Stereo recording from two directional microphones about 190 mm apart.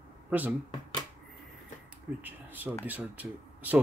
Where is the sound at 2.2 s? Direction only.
10° right (ahead or behind).